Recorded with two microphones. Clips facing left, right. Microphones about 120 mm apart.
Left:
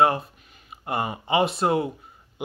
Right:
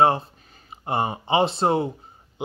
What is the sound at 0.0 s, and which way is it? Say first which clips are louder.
Speech: right 2 dB; 30° right (ahead or behind).